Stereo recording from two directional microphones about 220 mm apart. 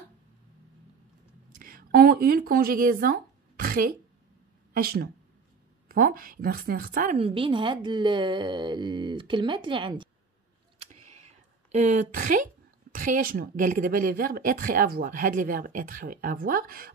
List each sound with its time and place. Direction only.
1.6 s a woman's voice: 40° right (ahead or behind); by 10.0 s 20° right (ahead or behind)
10.8 s a sound: 30° right (ahead or behind)
11.7 s speech: 30° right (ahead or behind)